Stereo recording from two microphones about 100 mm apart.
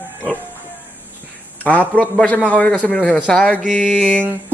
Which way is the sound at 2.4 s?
15° left (ahead or behind).